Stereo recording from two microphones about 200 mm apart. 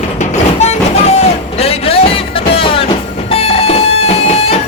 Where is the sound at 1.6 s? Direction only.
30° left (ahead or behind).